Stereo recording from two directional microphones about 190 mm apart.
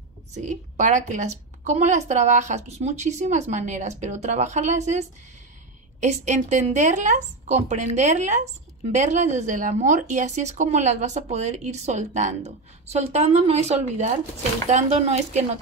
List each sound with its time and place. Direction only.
0.3 s speech: 40° right (ahead or behind)